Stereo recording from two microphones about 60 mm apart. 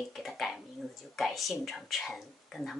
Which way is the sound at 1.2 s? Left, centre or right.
Centre.